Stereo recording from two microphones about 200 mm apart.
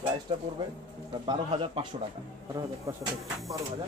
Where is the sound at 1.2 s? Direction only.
25° right (ahead or behind).